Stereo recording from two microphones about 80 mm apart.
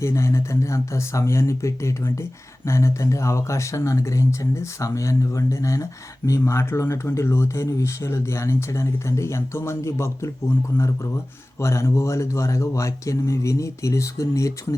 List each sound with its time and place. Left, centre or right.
0.0 s speech: left